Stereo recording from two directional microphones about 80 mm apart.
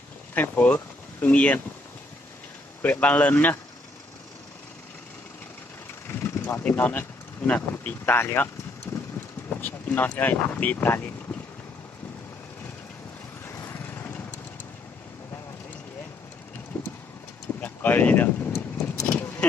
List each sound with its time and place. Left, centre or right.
0.3 s speech: left
2.8 s speech: centre
6.1 s vehicle: left
7.4 s speech: centre
8.0 s speech: left
8.9 s vehicle: left
9.5 s speech: left
13.4 s vehicle: left
13.7 s vehicle: left
16.7 s vehicle: left
17.6 s a sound: left
18.5 s vehicle: left